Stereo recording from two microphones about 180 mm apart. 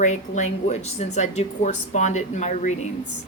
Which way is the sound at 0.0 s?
40° left (ahead or behind).